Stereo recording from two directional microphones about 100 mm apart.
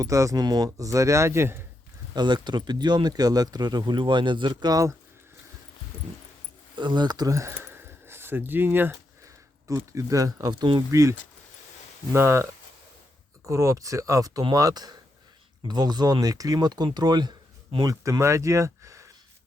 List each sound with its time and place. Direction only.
0.0 s speech: 30° right (ahead or behind)
2.1 s speech: 50° right (ahead or behind)
6.7 s speech: 50° right (ahead or behind); by 9.0 s 20° right (ahead or behind)
9.2 s speech: 30° right (ahead or behind)
10.9 s speech: 30° right (ahead or behind)
13.5 s speech: 30° right (ahead or behind); by 17.3 s 45° right (ahead or behind)
17.8 s speech: 35° right (ahead or behind)